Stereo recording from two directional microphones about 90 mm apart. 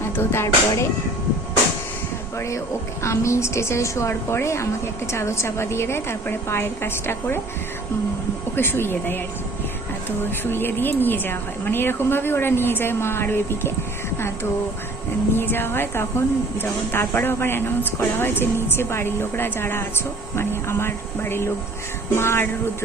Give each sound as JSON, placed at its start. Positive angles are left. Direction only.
{"t": 0.0, "sound": "speech", "side_deg": 25}
{"t": 3.0, "sound": "a woman's voice", "side_deg": 30}
{"t": 8.5, "sound": "speech", "side_deg": 25}
{"t": 10.4, "sound": "speech", "side_deg": 25}
{"t": 15.4, "sound": "speech", "side_deg": 25}